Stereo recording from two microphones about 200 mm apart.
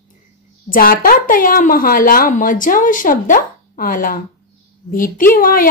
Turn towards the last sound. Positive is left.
turn(degrees=45)  # may be behind; listen again after turning